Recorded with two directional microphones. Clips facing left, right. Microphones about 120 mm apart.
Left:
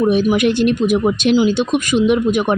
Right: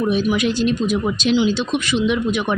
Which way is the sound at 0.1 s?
50° left (ahead or behind).